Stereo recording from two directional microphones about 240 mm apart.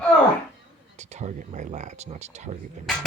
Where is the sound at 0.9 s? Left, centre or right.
Right.